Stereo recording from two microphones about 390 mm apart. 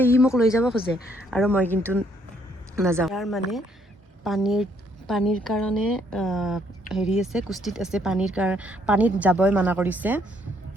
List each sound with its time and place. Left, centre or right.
0.0 s speech: centre